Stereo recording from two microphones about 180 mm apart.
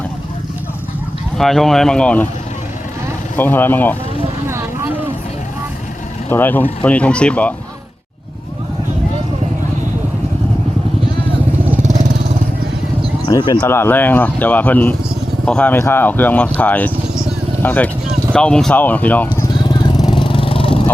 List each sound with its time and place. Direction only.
1.4 s speech: centre (ahead or behind)
3.3 s speech: 10° left (ahead or behind)
4.4 s vehicle: 15° right (ahead or behind)
6.3 s speech: 10° left (ahead or behind)
13.2 s speech: 25° left (ahead or behind)
13.6 s speech: 10° left (ahead or behind)
19.5 s vehicle: 25° left (ahead or behind)